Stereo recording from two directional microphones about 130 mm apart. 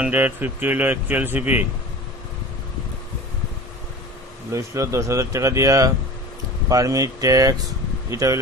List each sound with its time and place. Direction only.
0.0 s speech: 15° right (ahead or behind)
4.5 s speech: 20° right (ahead or behind)